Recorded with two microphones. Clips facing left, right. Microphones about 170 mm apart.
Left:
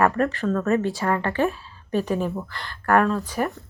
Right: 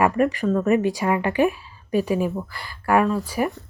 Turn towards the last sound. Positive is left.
turn(degrees=-10)  # may be behind; listen again after turning